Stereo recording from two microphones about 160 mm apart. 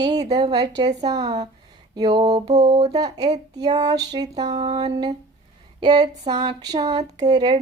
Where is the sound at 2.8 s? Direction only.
25° right (ahead or behind).